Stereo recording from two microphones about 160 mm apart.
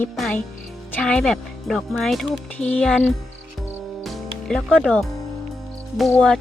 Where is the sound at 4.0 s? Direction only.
Centre (ahead or behind).